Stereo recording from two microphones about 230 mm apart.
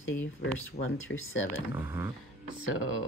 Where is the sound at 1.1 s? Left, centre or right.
Left.